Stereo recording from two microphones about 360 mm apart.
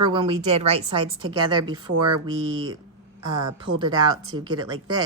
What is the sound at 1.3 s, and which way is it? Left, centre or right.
Speech, right.